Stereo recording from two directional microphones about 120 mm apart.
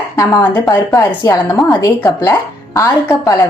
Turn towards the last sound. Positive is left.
turn(degrees=25)  # may be behind; listen again after turning